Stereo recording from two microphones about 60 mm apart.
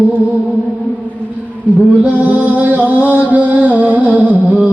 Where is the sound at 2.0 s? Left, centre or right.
Right.